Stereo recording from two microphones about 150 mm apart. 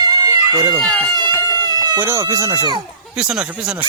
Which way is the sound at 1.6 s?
30° right (ahead or behind).